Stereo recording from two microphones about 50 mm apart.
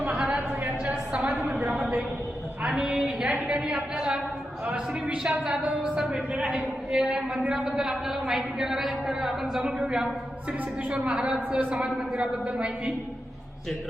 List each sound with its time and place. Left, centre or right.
0.9 s a sound: right
2.6 s a woman's voice: centre
5.0 s a woman's voice: centre
9.6 s a woman's voice: centre